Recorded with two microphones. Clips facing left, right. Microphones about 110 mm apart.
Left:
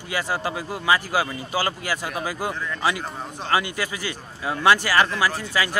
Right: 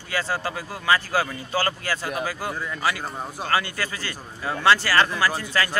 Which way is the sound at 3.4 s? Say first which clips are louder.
Left 2 dB; 15° left (ahead or behind).